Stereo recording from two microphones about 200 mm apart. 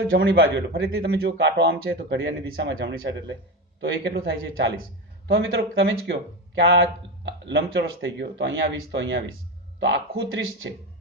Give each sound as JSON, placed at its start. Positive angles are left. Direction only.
{"t": 0.2, "sound": "a man's voice", "side_deg": -55}
{"t": 7.3, "sound": "a man's voice", "side_deg": -65}